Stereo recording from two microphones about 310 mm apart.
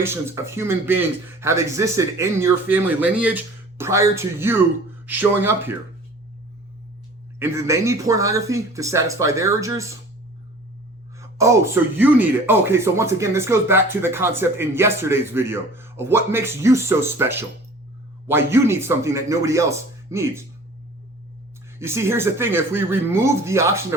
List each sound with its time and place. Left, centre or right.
0.0 s speech: centre
7.3 s speech: centre
11.2 s speech: centre
21.8 s speech: centre